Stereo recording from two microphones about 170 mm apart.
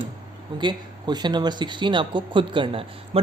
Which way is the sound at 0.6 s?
25° right (ahead or behind).